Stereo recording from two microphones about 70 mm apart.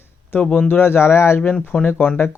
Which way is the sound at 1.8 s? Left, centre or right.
Left.